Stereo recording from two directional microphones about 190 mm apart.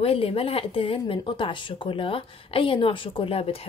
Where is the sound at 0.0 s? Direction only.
30° left (ahead or behind).